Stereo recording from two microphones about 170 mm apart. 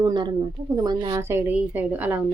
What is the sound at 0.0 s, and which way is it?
A woman's voice, 25° right (ahead or behind).